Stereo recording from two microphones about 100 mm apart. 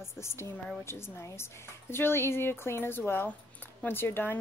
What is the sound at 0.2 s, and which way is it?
Speech, 25° left (ahead or behind).